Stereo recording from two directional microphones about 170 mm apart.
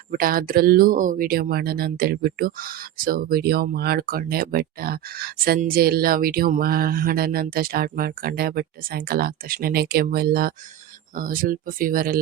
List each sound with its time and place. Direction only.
0.1 s speech: 60° right (ahead or behind)